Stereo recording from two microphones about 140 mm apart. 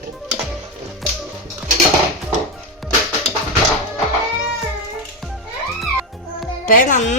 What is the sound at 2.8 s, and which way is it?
Music, centre (ahead or behind).